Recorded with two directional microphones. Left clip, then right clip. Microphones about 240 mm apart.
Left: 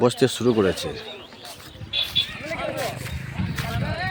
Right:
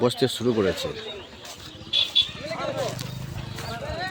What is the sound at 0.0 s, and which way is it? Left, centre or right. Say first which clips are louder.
Speech: left 3 dB; left.